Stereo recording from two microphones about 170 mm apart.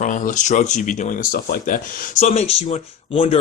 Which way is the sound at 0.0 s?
50° left (ahead or behind).